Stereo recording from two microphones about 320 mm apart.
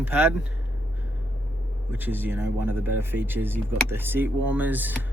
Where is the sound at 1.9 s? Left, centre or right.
Centre.